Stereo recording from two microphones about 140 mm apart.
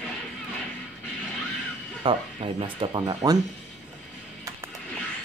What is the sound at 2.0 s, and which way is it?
Speech, 40° right (ahead or behind).